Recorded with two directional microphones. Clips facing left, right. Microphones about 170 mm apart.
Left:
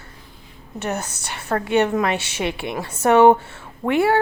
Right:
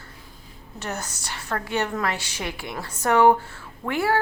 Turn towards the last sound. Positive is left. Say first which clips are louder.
# left 6 dB
turn(degrees=25)  # may be behind; listen again after turning